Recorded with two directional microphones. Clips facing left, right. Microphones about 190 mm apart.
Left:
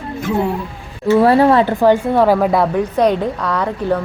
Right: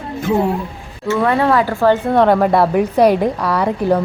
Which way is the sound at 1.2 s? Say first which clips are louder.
Left 3 dB; 30° left (ahead or behind).